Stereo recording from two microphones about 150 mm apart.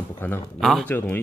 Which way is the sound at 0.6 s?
Centre (ahead or behind).